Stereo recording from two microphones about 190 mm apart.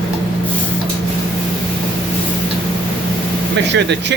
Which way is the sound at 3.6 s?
70° right (ahead or behind).